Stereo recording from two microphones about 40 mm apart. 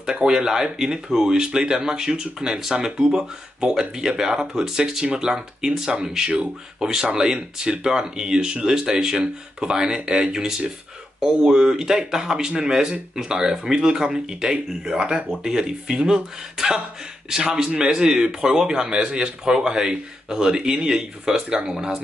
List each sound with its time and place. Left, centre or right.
0.2 s a man's voice: centre